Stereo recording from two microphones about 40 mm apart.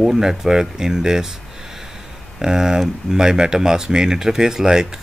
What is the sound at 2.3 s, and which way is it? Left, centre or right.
Speech, centre.